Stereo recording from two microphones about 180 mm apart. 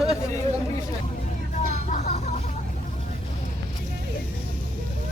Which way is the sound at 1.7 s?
40° left (ahead or behind).